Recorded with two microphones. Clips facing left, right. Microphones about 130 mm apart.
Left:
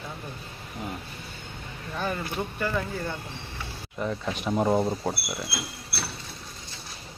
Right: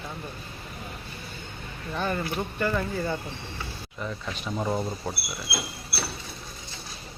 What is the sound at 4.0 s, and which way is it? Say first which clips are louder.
Speech: left 5 dB; 20° left (ahead or behind).